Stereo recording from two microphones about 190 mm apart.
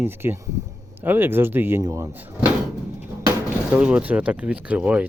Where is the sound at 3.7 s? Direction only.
5° right (ahead or behind).